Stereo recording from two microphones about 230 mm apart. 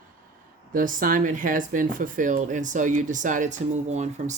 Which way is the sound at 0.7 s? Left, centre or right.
Right.